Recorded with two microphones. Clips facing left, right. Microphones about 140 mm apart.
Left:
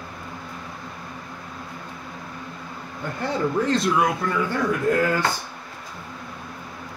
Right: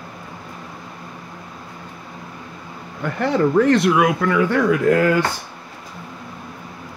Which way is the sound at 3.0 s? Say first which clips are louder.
Right 7 dB; 80° right.